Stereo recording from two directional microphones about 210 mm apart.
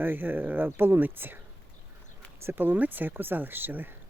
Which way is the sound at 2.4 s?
10° right (ahead or behind).